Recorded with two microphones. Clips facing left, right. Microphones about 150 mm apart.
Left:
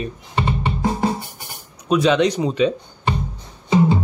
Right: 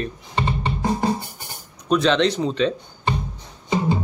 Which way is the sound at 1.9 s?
10° left (ahead or behind).